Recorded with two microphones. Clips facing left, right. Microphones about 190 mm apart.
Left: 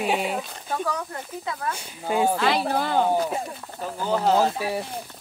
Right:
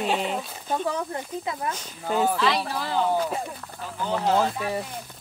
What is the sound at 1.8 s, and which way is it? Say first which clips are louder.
Speech: left 3 dB; 10° left (ahead or behind).